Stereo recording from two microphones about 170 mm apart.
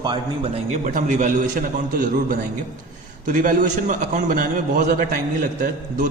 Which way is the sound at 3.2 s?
50° right (ahead or behind).